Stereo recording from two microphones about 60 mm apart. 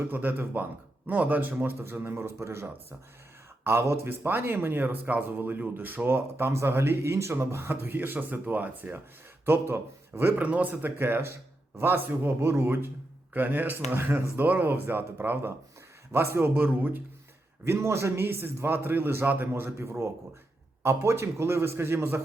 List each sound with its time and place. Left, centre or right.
0.1 s a man's voice: right
10.3 s speech: right
17.7 s a man's voice: right